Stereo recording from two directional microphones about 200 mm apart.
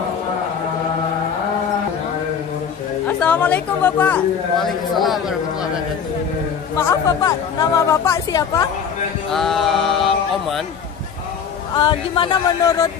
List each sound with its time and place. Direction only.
3.1 s speech: 5° left (ahead or behind)
6.8 s speech: 15° left (ahead or behind)
9.3 s a sound: centre (ahead or behind)
11.7 s speech: 25° left (ahead or behind)